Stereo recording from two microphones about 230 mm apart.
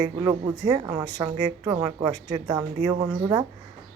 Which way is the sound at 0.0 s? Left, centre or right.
Centre.